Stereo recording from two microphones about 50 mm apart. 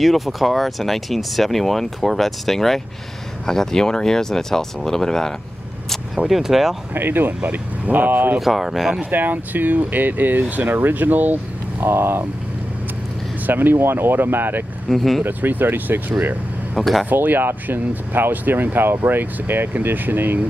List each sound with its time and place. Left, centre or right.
0.0 s speech: centre
6.2 s speech: centre
6.9 s speech: right
7.4 s speech: right
8.4 s speech: centre
9.1 s speech: right
11.8 s speech: right
13.5 s speech: right
14.9 s speech: centre
15.2 s speech: right
16.7 s speech: centre
17.1 s speech: right